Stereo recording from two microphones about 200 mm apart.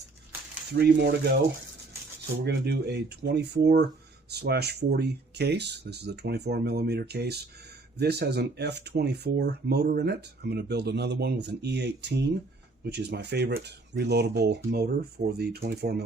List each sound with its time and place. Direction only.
0.7 s speech: 55° right (ahead or behind)
2.4 s speech: 55° right (ahead or behind)